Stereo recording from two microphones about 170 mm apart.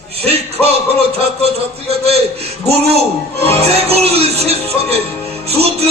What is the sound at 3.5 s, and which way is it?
Music, 35° right (ahead or behind).